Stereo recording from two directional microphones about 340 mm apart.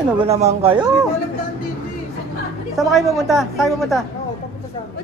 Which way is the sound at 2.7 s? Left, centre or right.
Centre.